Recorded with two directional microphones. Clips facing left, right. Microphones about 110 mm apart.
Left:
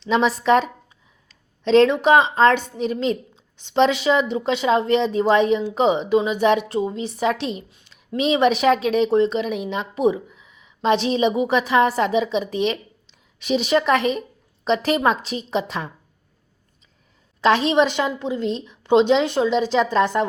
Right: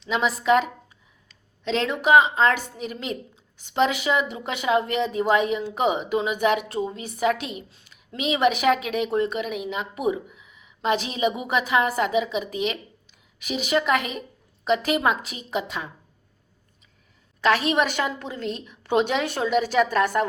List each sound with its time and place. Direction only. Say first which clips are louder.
0.0 s a woman's voice: left 5 dB; 35° left (ahead or behind)
17.4 s a woman's voice: left 4 dB; 25° left (ahead or behind)